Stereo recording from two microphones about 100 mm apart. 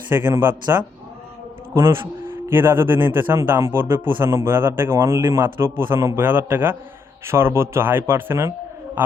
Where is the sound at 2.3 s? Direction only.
20° right (ahead or behind).